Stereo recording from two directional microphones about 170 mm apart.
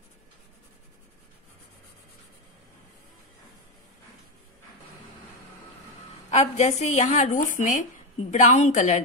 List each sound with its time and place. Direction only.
6.3 s a woman's voice: 40° left (ahead or behind)